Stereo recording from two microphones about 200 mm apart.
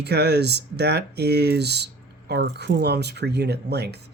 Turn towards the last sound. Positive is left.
turn(degrees=-55)  # may be behind; listen again after turning